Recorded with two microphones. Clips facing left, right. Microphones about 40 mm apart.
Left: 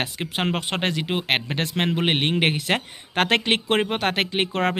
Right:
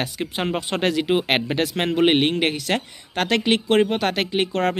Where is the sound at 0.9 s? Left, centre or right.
Centre.